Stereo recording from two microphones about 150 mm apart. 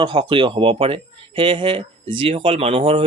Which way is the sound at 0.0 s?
35° right (ahead or behind).